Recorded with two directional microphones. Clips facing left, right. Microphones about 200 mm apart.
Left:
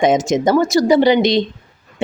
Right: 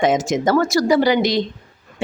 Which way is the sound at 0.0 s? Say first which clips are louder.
Left 3 dB; 20° left (ahead or behind).